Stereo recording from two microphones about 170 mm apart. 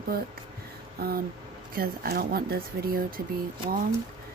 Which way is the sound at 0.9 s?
65° right (ahead or behind).